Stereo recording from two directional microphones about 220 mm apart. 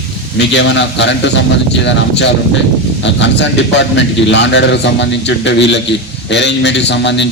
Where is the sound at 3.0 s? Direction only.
55° left (ahead or behind).